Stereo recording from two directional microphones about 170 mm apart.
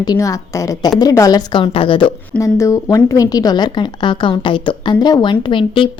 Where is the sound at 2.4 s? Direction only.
20° left (ahead or behind).